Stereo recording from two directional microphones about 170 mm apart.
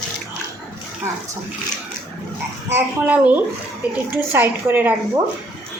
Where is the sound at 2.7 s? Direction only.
10° right (ahead or behind).